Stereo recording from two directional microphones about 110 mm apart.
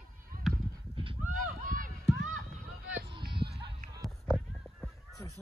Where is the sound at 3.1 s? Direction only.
50° right (ahead or behind).